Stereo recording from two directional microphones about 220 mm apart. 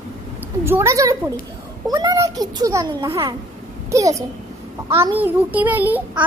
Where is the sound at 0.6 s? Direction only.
10° right (ahead or behind).